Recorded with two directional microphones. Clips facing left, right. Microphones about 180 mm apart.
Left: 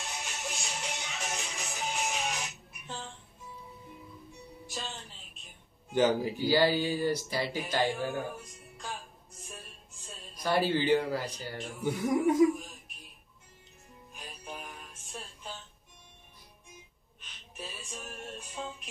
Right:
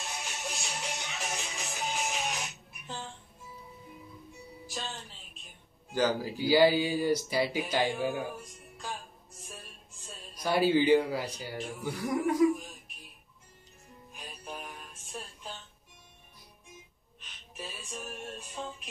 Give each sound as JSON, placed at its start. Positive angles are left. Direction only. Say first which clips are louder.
{"t": 0.0, "sound": "music", "louder": "even", "side_deg": 0}
{"t": 4.3, "sound": "music", "louder": "right 2 dB", "side_deg": 0}
{"t": 5.9, "sound": "speech", "louder": "left 3 dB", "side_deg": 20}
{"t": 6.5, "sound": "speech", "louder": "right 3 dB", "side_deg": -10}
{"t": 8.1, "sound": "music", "louder": "right 1 dB", "side_deg": 0}
{"t": 10.4, "sound": "speech", "louder": "right 3 dB", "side_deg": -10}
{"t": 14.1, "sound": "music", "louder": "right 1 dB", "side_deg": 0}
{"t": 17.2, "sound": "music", "louder": "right 1 dB", "side_deg": 0}